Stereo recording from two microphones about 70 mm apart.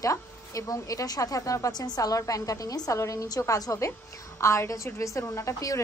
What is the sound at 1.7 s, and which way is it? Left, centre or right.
A woman's voice, left.